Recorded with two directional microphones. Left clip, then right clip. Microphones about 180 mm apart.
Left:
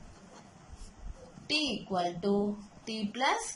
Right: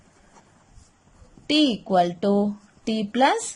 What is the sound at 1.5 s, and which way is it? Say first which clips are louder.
A woman's voice: right 11 dB; 55° right (ahead or behind).